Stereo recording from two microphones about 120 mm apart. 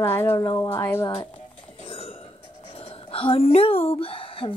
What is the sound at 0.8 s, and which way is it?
Speech, 25° left (ahead or behind).